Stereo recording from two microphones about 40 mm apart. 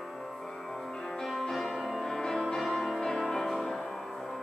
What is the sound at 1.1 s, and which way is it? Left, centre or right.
Music, centre.